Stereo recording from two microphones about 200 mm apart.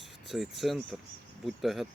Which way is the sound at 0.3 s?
Centre (ahead or behind).